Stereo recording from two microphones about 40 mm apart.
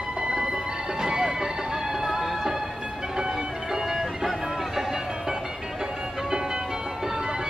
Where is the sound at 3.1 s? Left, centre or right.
Centre.